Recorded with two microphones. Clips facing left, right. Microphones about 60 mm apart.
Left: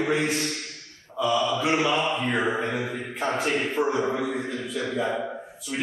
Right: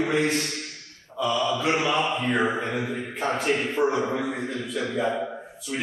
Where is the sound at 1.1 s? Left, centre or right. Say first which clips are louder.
Left 1 dB; centre.